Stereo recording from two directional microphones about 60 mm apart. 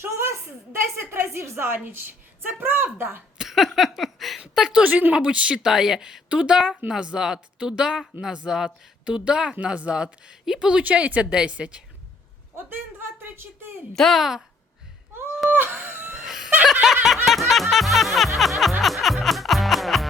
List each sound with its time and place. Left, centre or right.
0.0 s a woman's voice: right
3.3 s a sound: centre
4.7 s speech: right
13.2 s a sound: right
13.9 s speech: centre
15.4 s a sound: right
16.2 s chuckle: centre
16.8 s snicker: centre
17.5 s music: centre